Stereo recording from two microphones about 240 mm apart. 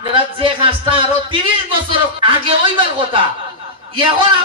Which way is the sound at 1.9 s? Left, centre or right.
Right.